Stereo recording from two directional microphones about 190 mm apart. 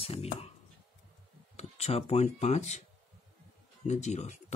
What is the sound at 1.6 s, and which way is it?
Speech, 35° left (ahead or behind).